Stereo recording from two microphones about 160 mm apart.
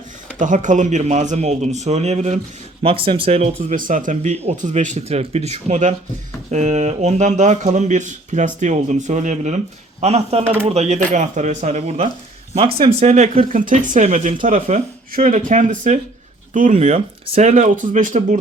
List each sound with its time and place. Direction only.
0.3 s speech: 50° right (ahead or behind)
2.8 s speech: 35° right (ahead or behind)
3.8 s speech: 55° right (ahead or behind)